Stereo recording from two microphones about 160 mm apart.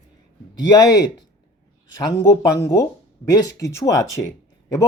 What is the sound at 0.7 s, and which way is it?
Speech, 20° left (ahead or behind).